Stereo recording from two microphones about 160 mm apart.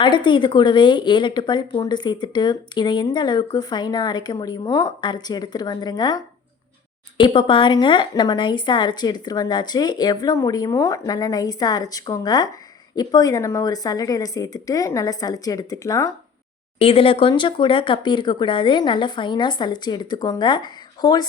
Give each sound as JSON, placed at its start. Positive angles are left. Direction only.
{"t": 0.0, "sound": "speech", "side_deg": 30}
{"t": 16.7, "sound": "speech", "side_deg": 35}